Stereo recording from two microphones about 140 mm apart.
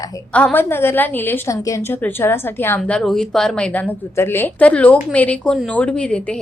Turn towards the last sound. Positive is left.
turn(degrees=5)  # may be behind; listen again after turning